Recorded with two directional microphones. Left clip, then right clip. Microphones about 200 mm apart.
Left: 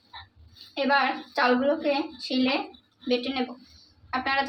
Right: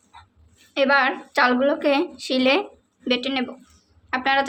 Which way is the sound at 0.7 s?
45° right (ahead or behind).